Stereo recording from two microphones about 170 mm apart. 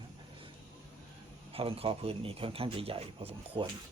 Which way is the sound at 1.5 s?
35° right (ahead or behind).